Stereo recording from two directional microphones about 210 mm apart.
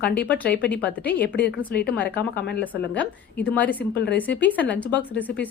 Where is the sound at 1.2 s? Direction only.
55° left (ahead or behind).